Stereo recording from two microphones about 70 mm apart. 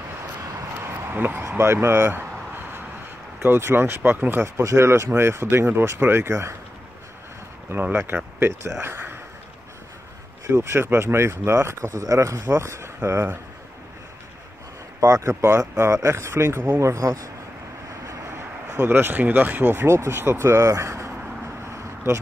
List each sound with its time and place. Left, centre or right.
0.8 s a sound: right
3.4 s speech: right
7.7 s speech: right
8.8 s a sound: right
10.4 s speech: right
15.0 s speech: right
16.8 s speech: right
18.7 s speech: right
21.6 s vehicle: right